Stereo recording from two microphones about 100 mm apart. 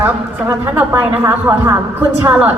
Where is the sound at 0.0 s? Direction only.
25° right (ahead or behind).